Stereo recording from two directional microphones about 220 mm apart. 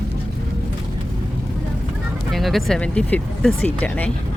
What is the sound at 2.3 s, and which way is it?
Speech, centre (ahead or behind).